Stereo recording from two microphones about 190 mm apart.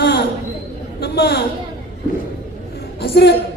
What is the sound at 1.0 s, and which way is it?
Speech, 60° left (ahead or behind).